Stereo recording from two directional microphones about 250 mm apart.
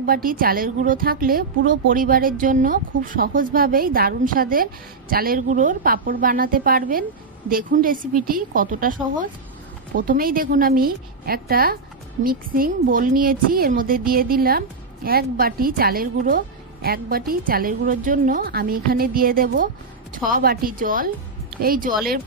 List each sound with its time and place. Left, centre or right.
0.0 s a woman's voice: right